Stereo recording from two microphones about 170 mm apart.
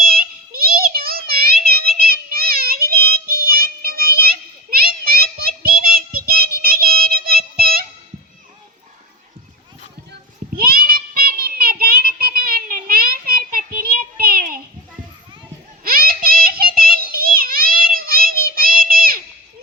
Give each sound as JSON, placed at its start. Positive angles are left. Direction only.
{"t": 0.0, "sound": "child singing", "side_deg": -60}
{"t": 10.6, "sound": "child singing", "side_deg": -60}
{"t": 15.8, "sound": "child singing", "side_deg": -60}